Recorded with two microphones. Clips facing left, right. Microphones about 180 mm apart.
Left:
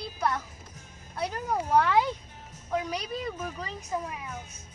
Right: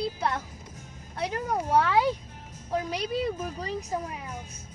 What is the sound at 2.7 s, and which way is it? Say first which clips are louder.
Speech: right 2 dB; 30° right (ahead or behind).